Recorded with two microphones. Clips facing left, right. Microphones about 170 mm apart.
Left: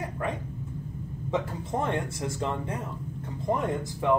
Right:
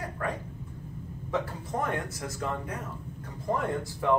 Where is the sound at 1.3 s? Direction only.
25° left (ahead or behind).